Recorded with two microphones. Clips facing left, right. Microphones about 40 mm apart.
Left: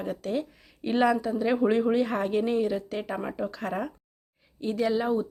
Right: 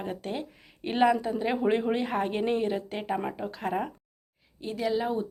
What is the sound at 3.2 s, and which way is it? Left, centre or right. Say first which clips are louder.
Speech: left 1 dB; centre.